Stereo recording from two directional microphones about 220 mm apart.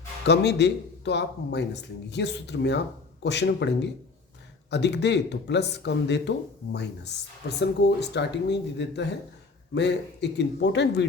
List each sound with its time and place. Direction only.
0.3 s a man's voice: 50° left (ahead or behind)
7.6 s a man's voice: 50° left (ahead or behind)